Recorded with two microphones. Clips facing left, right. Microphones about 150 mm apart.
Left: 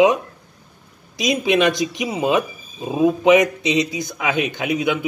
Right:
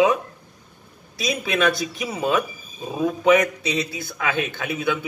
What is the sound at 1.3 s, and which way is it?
A man's voice, 20° left (ahead or behind).